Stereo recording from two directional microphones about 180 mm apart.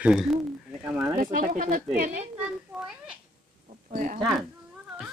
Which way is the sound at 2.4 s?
5° right (ahead or behind).